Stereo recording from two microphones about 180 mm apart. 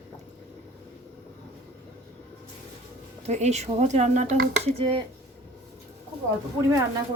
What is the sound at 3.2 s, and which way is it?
Speech, 40° right (ahead or behind).